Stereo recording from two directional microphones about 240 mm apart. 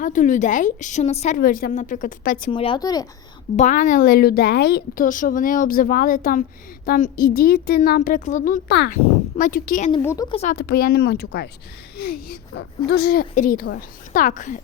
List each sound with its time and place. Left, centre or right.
0.0 s a woman's voice: left
2.5 s speech: left
3.5 s a woman's voice: left
10.0 s speech: centre
10.3 s a woman's voice: left